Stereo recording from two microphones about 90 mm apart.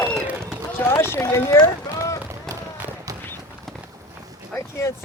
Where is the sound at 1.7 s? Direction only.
35° left (ahead or behind).